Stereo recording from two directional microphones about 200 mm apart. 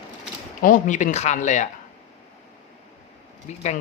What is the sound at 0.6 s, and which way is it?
Speech, 40° left (ahead or behind).